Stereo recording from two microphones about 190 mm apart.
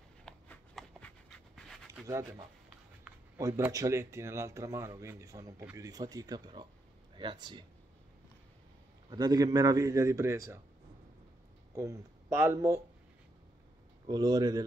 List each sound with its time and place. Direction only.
0.2 s dog: 5° left (ahead or behind)
2.0 s speech: 15° right (ahead or behind)
9.1 s speech: 20° right (ahead or behind)
11.7 s speech: 15° right (ahead or behind)
14.0 s speech: 20° right (ahead or behind)